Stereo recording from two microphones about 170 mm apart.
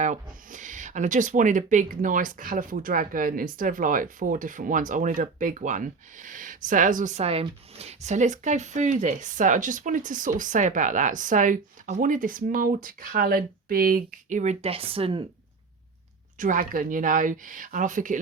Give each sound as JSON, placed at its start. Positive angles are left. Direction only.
{"t": 0.4, "sound": "speech", "side_deg": -50}
{"t": 16.4, "sound": "speech", "side_deg": -50}